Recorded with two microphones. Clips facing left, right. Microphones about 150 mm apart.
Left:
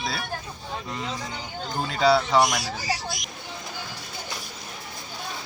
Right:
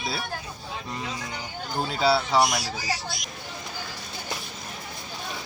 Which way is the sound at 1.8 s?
5° right (ahead or behind).